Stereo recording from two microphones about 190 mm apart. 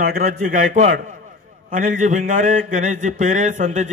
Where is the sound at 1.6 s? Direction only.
45° right (ahead or behind).